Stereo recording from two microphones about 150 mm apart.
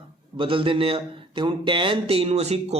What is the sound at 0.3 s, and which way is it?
Speech, 35° right (ahead or behind).